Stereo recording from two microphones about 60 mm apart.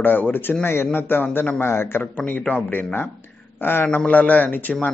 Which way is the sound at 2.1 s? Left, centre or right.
Left.